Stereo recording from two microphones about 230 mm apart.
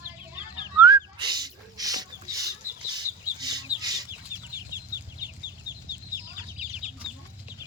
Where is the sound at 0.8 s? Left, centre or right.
Centre.